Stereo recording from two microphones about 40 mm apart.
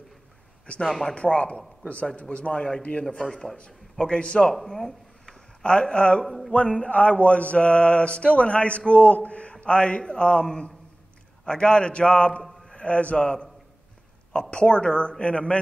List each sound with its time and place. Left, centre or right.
0.7 s speech: centre
1.1 s mantra: left
2.3 s a man's voice: left
2.8 s mantra: left
3.2 s speech: centre
4.0 s mantra: left
4.5 s speech: centre
5.6 s mantra: left
6.2 s a sound: centre
6.5 s mantra: left
12.6 s a man's voice: left
14.3 s mantra: left